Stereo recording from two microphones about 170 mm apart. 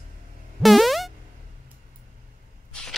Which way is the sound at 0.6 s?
Centre (ahead or behind).